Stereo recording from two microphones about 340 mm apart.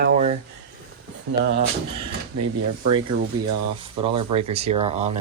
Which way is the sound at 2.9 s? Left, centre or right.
Right.